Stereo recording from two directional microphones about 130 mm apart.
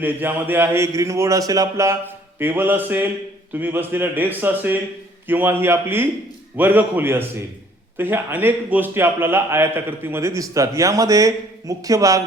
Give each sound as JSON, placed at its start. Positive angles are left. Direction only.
{"t": 0.0, "sound": "a man's voice", "side_deg": -15}